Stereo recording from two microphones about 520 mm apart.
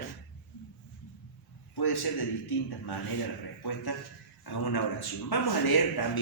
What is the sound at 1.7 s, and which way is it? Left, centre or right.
Speech, left.